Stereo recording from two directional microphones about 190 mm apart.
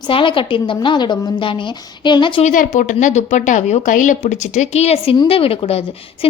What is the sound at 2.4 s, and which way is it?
Speech, 40° left (ahead or behind).